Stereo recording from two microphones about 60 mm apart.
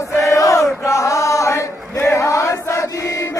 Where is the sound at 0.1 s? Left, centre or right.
Left.